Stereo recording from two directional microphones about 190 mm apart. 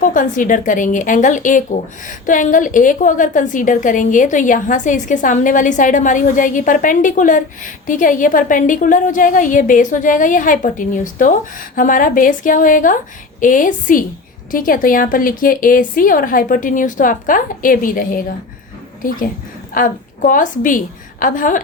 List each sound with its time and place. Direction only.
0.0 s a woman's voice: 45° left (ahead or behind)
19.7 s a woman's voice: 45° left (ahead or behind)